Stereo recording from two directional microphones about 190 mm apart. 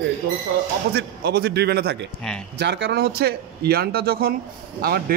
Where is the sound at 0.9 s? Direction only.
55° right (ahead or behind).